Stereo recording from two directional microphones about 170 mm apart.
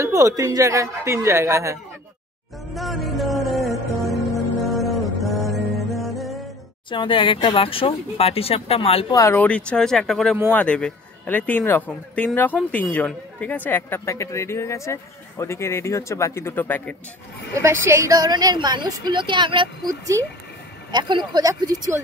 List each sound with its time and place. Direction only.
0.0 s speech: 20° right (ahead or behind)
2.7 s music: centre (ahead or behind)
6.9 s speech: 30° left (ahead or behind)
9.1 s a woman's voice: 15° left (ahead or behind)
17.6 s a woman's voice: 15° right (ahead or behind)